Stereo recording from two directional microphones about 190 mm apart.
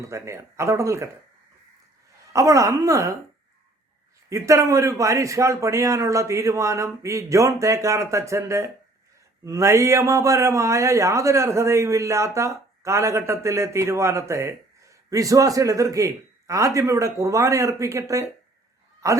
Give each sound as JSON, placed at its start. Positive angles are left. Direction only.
{"t": 0.1, "sound": "speech", "side_deg": -15}
{"t": 2.3, "sound": "speech", "side_deg": -15}
{"t": 4.3, "sound": "speech", "side_deg": -15}